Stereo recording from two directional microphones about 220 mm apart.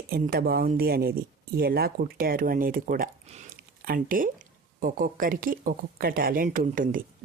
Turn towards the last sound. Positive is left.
turn(degrees=-40)  # may be behind; listen again after turning